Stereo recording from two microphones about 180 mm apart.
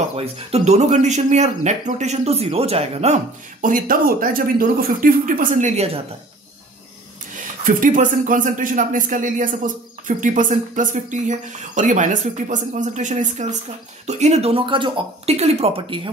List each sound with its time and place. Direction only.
0.1 s speech: 35° right (ahead or behind)
3.6 s speech: 50° right (ahead or behind)
7.6 s speech: 45° right (ahead or behind); by 16.1 s 30° right (ahead or behind)